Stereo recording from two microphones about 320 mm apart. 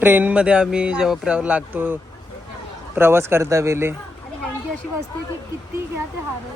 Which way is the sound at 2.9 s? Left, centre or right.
Centre.